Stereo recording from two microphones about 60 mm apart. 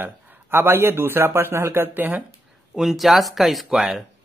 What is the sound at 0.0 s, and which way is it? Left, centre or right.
A man's voice, right.